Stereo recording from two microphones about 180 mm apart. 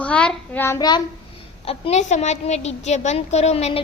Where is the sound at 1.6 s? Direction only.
35° left (ahead or behind).